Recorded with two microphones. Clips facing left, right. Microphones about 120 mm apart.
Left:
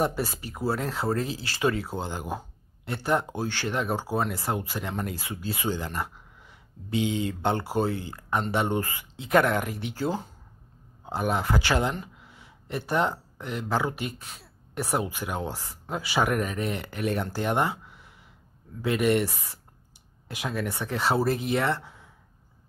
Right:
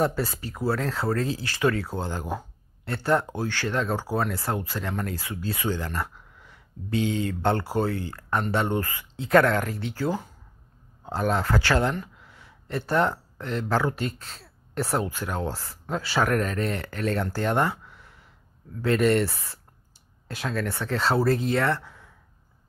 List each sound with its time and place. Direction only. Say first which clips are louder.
0.0 s speech: right 2 dB; 20° left (ahead or behind)